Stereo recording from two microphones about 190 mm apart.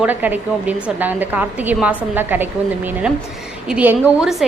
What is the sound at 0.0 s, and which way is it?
A woman's voice, 10° right (ahead or behind).